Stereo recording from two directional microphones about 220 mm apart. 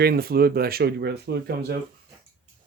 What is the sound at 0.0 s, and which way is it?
Speech, 45° right (ahead or behind).